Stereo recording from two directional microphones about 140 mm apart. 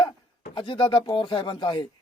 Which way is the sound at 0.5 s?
35° left (ahead or behind).